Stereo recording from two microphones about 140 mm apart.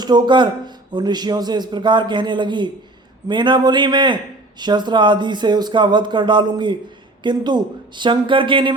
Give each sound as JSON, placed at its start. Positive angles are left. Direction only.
{"t": 0.0, "sound": "speech", "side_deg": -30}